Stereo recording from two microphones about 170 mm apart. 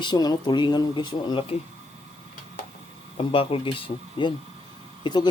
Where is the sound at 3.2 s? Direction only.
30° left (ahead or behind).